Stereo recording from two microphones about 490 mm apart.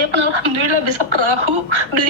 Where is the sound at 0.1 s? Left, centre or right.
Right.